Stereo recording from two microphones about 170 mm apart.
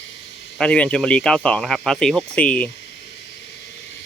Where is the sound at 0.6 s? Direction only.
5° left (ahead or behind).